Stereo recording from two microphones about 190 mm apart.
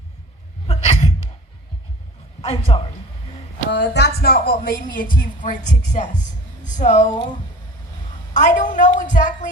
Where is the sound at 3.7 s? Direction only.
60° left (ahead or behind); by 7.1 s 40° left (ahead or behind).